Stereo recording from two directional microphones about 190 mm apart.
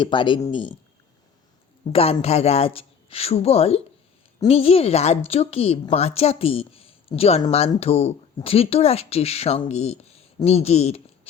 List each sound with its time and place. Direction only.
0.0 s speech: 25° left (ahead or behind)
1.9 s a woman's voice: 30° left (ahead or behind)